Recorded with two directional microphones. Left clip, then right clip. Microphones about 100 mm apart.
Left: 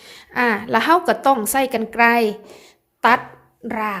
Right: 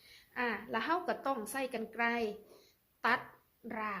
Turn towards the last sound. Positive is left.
turn(degrees=25)  # may be behind; listen again after turning